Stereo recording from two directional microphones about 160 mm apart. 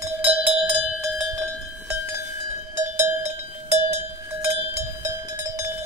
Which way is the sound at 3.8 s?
45° right (ahead or behind).